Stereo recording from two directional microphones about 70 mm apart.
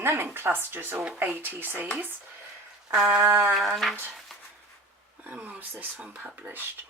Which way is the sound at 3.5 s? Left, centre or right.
Centre.